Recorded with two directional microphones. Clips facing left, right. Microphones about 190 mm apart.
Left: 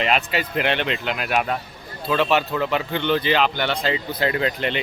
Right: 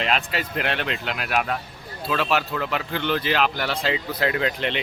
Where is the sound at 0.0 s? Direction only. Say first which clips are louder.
Left 3 dB; centre (ahead or behind).